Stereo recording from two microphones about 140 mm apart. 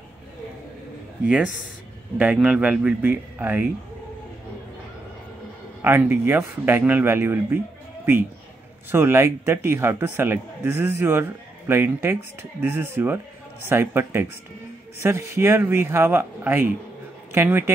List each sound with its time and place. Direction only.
2.1 s speech: 10° right (ahead or behind)
5.8 s speech: 15° right (ahead or behind)